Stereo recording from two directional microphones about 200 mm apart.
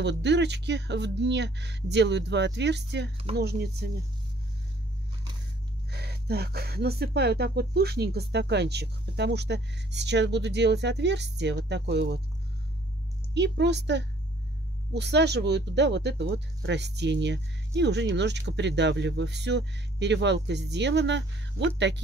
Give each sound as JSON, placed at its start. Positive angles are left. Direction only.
{"t": 0.0, "sound": "speech", "side_deg": -60}
{"t": 5.9, "sound": "speech", "side_deg": -55}
{"t": 13.3, "sound": "speech", "side_deg": -60}